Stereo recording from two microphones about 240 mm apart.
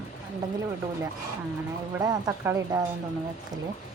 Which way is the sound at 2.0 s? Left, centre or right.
Centre.